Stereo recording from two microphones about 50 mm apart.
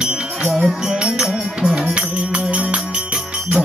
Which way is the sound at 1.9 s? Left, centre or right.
Right.